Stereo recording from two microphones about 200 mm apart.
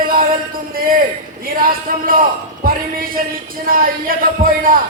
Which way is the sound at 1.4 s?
45° right (ahead or behind).